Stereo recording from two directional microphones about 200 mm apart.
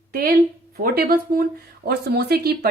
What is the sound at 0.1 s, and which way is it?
Speech, 50° right (ahead or behind).